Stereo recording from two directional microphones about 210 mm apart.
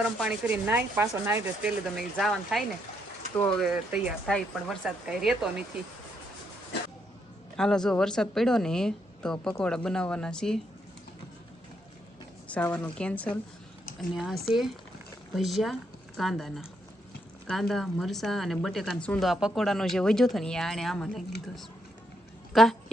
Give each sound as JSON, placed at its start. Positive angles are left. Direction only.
{"t": 0.0, "sound": "speech", "side_deg": -5}
{"t": 7.5, "sound": "speech", "side_deg": 5}
{"t": 12.5, "sound": "a woman's voice", "side_deg": 5}
{"t": 14.4, "sound": "speech", "side_deg": 0}